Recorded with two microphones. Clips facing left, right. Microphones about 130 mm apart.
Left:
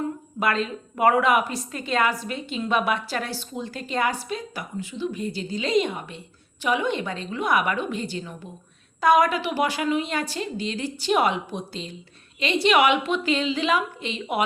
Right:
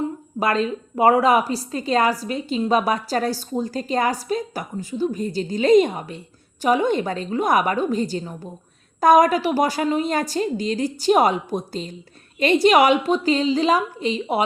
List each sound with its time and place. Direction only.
0.0 s a woman's voice: 35° right (ahead or behind)